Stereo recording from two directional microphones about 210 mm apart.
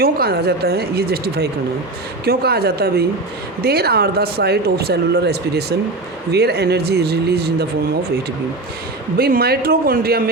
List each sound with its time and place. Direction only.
0.0 s speech: 45° right (ahead or behind)
9.1 s speech: 45° right (ahead or behind)